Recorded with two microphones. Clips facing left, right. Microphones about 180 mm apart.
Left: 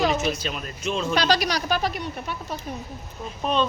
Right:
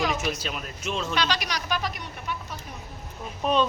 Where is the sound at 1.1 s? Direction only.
35° left (ahead or behind).